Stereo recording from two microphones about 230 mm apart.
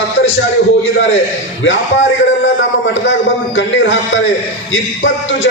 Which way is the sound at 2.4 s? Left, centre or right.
Left.